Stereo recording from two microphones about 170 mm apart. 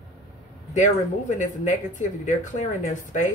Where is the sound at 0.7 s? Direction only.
50° left (ahead or behind).